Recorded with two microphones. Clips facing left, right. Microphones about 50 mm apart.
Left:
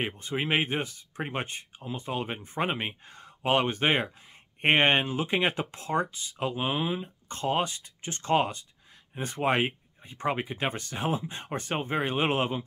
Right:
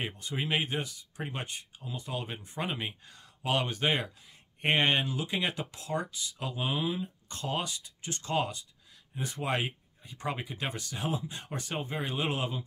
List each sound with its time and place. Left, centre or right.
0.0 s speech: left